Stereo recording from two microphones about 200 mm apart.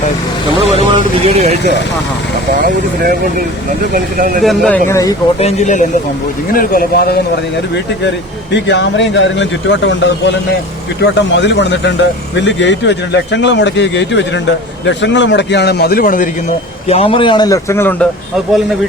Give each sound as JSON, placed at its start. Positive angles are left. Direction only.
{"t": 0.6, "sound": "speech", "side_deg": -30}
{"t": 2.6, "sound": "speech", "side_deg": -45}
{"t": 4.4, "sound": "speech", "side_deg": 5}
{"t": 5.4, "sound": "speech", "side_deg": 35}
{"t": 16.9, "sound": "a man's voice", "side_deg": 30}